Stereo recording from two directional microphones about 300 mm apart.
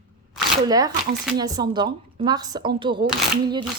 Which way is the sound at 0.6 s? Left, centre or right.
Centre.